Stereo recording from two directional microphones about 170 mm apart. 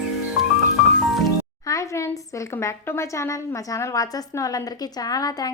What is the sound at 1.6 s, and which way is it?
A woman's voice, 20° left (ahead or behind).